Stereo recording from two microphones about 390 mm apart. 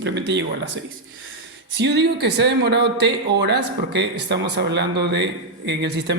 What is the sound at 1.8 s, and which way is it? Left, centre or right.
Speech, right.